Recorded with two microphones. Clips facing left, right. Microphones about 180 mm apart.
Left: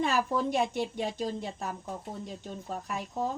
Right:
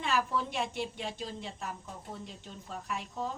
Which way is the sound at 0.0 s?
40° left (ahead or behind).